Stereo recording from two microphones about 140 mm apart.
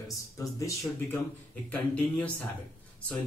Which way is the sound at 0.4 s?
25° left (ahead or behind).